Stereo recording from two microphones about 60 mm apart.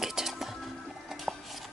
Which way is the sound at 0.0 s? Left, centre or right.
Centre.